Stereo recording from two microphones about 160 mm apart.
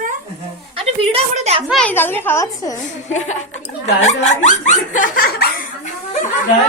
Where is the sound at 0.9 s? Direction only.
40° right (ahead or behind).